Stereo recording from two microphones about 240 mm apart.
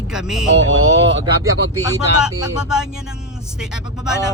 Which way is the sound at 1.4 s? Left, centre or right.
Centre.